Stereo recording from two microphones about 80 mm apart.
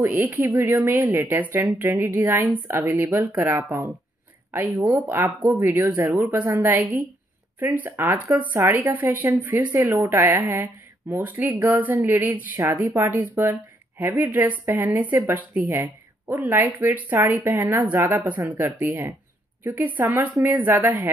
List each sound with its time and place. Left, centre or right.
0.0 s speech: right
8.5 s speech: right
12.8 s speech: right